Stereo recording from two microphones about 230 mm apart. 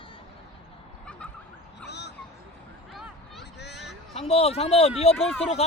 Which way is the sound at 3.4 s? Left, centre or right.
Left.